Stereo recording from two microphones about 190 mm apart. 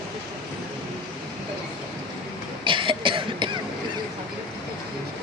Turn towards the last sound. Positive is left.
turn(degrees=-25)  # may be behind; listen again after turning